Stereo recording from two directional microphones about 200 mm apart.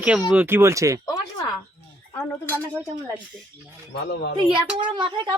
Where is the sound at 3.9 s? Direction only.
55° left (ahead or behind).